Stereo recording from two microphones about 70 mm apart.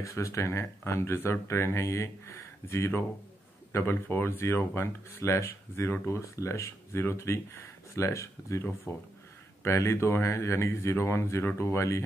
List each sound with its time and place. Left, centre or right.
0.0 s speech: left
8.9 s speech: left
9.6 s speech: left